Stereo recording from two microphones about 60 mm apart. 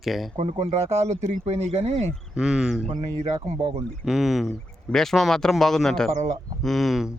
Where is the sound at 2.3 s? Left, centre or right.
Centre.